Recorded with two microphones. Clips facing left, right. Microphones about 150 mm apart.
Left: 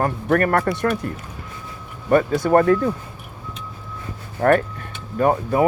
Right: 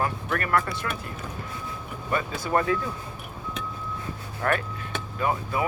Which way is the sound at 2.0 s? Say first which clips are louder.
Left 12 dB; 50° left (ahead or behind).